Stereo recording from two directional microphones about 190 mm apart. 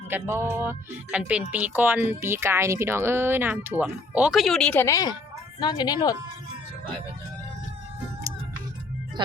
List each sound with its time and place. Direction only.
0.1 s speech: 15° right (ahead or behind); by 6.1 s 20° left (ahead or behind)